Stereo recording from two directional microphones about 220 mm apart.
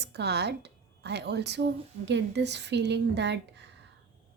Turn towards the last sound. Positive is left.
turn(degrees=-50)  # may be behind; listen again after turning